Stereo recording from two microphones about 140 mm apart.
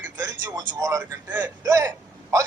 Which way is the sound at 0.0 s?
25° right (ahead or behind).